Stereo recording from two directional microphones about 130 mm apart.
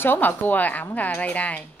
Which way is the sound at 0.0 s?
15° left (ahead or behind).